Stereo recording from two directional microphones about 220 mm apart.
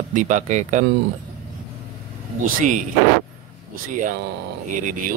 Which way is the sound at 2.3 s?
35° right (ahead or behind).